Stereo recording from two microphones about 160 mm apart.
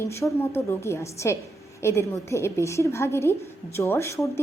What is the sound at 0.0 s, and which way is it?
A woman's voice, 15° left (ahead or behind).